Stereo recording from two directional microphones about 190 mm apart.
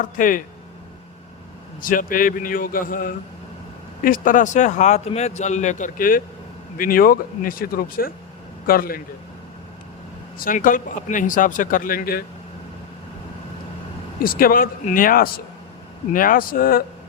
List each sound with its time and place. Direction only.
0.0 s speech: 45° left (ahead or behind)
1.8 s speech: 45° left (ahead or behind)
10.3 s speech: 45° left (ahead or behind)
14.2 s speech: 50° left (ahead or behind)